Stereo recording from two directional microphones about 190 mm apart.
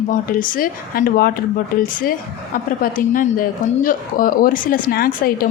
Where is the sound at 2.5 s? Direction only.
45° left (ahead or behind).